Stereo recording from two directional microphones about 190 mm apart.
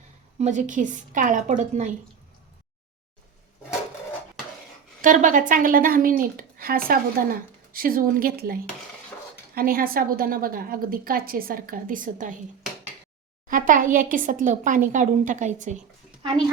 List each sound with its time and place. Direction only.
0.3 s speech: 40° right (ahead or behind)
5.0 s speech: 45° right (ahead or behind)
9.6 s speech: 50° right (ahead or behind)
13.5 s speech: 45° right (ahead or behind)